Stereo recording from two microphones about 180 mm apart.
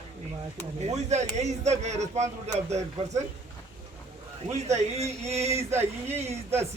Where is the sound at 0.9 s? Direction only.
40° right (ahead or behind).